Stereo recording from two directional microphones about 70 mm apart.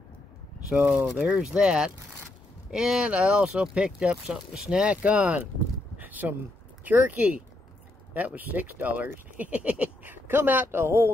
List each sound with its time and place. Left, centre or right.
0.7 s speech: right
5.9 s a sound: right
6.8 s speech: right